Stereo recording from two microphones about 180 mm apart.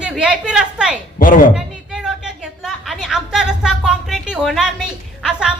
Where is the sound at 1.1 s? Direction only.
50° left (ahead or behind).